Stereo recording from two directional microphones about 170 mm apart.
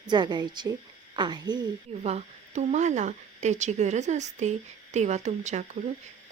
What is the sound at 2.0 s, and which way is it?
Speech, 40° right (ahead or behind).